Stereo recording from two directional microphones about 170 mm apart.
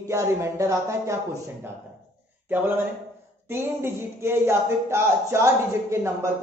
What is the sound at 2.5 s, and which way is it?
A woman's voice, 10° right (ahead or behind).